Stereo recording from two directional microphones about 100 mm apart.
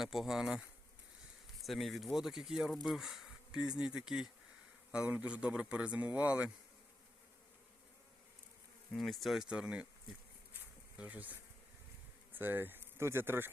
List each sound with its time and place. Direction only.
0.0 s speech: 5° right (ahead or behind)
1.6 s a man's voice: centre (ahead or behind)
9.0 s speech: centre (ahead or behind)
10.9 s a man's voice: 15° right (ahead or behind)